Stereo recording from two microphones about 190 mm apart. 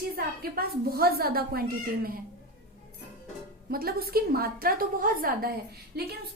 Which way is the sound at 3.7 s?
50° right (ahead or behind).